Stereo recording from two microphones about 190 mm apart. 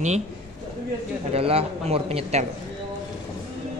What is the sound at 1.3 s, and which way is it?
A man's voice, 30° right (ahead or behind).